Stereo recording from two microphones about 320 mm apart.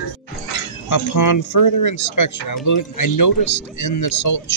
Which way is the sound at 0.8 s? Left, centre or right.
Left.